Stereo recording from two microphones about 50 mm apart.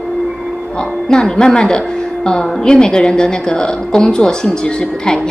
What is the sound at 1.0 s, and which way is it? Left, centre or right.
A woman's voice, centre.